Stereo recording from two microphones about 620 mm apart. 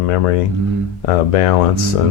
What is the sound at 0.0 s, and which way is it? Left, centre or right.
Speech, left.